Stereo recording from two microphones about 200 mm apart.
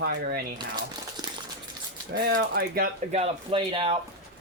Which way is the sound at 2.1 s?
50° right (ahead or behind).